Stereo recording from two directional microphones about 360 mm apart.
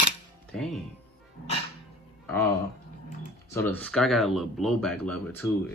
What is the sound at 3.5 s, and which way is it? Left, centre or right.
Speech, centre.